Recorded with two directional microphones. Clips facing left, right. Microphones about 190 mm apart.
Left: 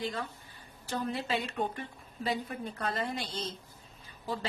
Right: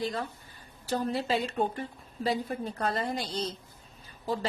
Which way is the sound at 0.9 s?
35° right (ahead or behind).